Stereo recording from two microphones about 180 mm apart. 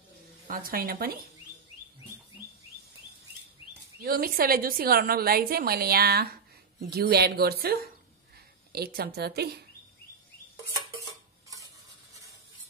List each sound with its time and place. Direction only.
0.5 s a woman's voice: 50° right (ahead or behind)
4.0 s a woman's voice: 55° right (ahead or behind)